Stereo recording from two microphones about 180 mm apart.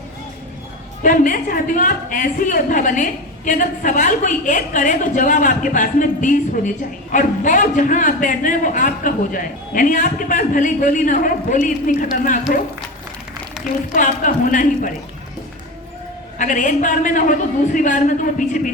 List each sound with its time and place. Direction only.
1.0 s a woman's voice: 50° left (ahead or behind)
13.9 s a woman's voice: 45° left (ahead or behind)
16.4 s a woman's voice: 45° left (ahead or behind)